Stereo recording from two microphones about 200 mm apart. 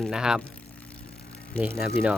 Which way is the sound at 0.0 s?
5° right (ahead or behind).